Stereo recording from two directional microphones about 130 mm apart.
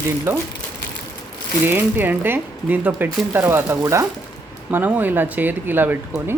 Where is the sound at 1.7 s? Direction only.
15° right (ahead or behind).